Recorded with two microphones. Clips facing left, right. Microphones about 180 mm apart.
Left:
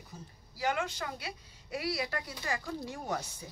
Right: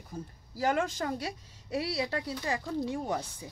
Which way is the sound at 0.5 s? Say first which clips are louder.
Right 4 dB; 45° right (ahead or behind).